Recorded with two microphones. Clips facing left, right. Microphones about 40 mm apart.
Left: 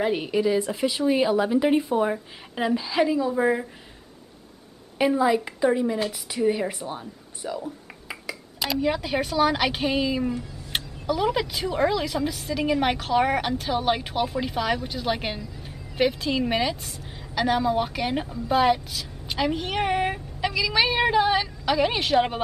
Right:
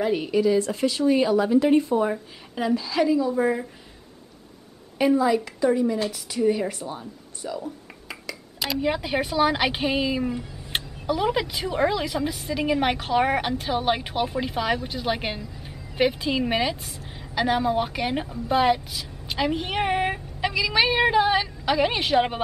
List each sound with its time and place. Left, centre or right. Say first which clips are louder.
0.0 s a woman's voice: right 1 dB; centre
4.9 s a woman's voice: right 1 dB; centre
7.6 s a sound: even; centre
8.6 s a woman's voice: even; centre